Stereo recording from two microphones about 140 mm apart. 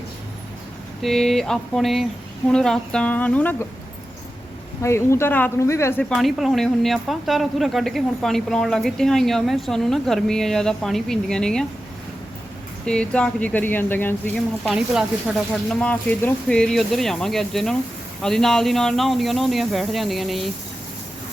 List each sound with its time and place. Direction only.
1.0 s speech: centre (ahead or behind)
4.8 s speech: 20° left (ahead or behind)
6.0 s speech: centre (ahead or behind)
12.8 s speech: 5° left (ahead or behind)
14.7 s speech: 5° right (ahead or behind)
15.8 s speech: 10° left (ahead or behind)